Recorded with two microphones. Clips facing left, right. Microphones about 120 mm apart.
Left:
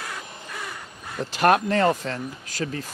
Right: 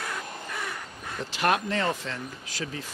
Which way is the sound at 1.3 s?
45° left (ahead or behind).